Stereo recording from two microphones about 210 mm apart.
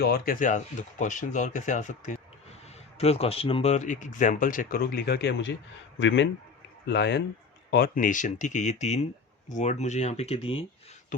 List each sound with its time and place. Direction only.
0.0 s speech: 45° left (ahead or behind)
7.7 s speech: 45° left (ahead or behind); by 10.7 s 25° left (ahead or behind)